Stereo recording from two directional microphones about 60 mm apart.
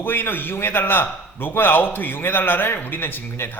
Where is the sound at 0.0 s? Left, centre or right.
Left.